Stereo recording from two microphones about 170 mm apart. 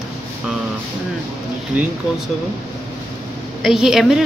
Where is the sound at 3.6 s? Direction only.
Centre (ahead or behind).